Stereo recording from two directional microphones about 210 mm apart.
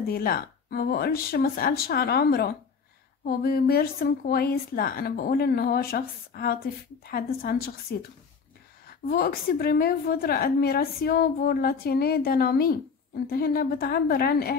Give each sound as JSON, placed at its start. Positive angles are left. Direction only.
{"t": 0.0, "sound": "a woman's voice", "side_deg": 45}
{"t": 8.8, "sound": "a woman's voice", "side_deg": 45}